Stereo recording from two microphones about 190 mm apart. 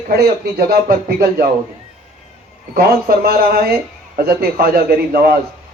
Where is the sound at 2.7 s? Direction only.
55° right (ahead or behind).